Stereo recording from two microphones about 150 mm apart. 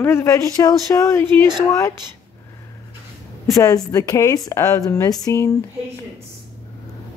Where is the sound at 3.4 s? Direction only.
20° left (ahead or behind).